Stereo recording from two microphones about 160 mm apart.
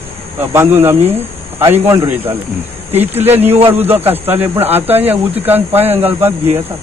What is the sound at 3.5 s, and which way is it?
Speech, 40° right (ahead or behind).